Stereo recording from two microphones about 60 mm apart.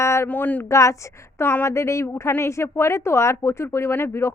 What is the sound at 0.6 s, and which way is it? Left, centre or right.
Speech, left.